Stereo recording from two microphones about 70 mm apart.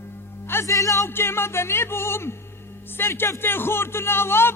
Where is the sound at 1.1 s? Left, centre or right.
Left.